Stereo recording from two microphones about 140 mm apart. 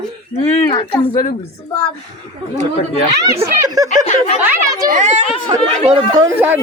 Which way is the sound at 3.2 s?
20° right (ahead or behind).